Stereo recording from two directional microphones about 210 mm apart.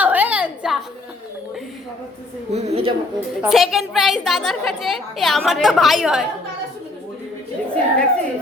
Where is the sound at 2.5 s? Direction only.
30° right (ahead or behind).